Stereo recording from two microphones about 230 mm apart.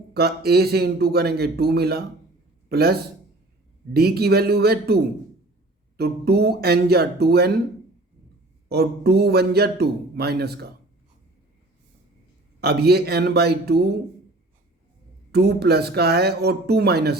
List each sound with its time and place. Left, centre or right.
0.1 s a man's voice: right
6.0 s a man's voice: right
8.7 s a man's voice: right
12.5 s a man's voice: right
15.3 s a man's voice: right